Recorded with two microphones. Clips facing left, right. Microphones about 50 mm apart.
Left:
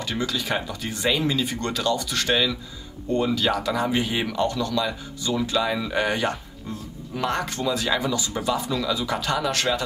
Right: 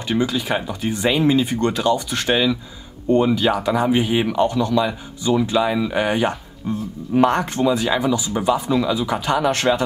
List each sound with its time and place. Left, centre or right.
0.1 s speech: right